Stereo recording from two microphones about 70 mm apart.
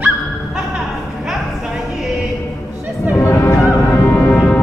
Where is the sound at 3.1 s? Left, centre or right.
Left.